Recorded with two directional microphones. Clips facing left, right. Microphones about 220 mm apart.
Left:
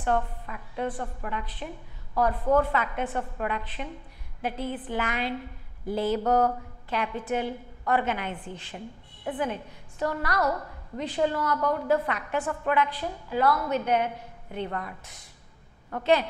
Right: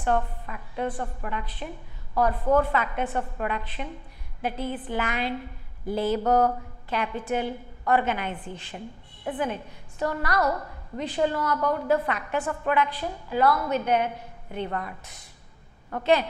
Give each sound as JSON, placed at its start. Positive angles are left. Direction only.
{"t": 0.0, "sound": "a woman's voice", "side_deg": -20}
{"t": 10.4, "sound": "a woman's voice", "side_deg": -25}